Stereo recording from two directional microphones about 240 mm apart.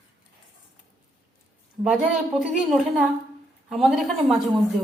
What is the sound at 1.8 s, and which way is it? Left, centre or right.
Speech, centre.